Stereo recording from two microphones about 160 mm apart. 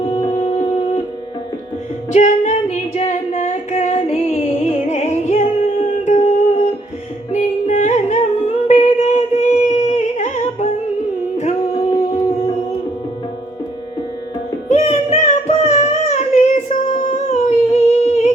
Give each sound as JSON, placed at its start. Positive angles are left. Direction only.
{"t": 0.3, "sound": "music", "side_deg": 45}
{"t": 2.1, "sound": "singing", "side_deg": 50}
{"t": 7.3, "sound": "music", "side_deg": 50}
{"t": 14.7, "sound": "music", "side_deg": 45}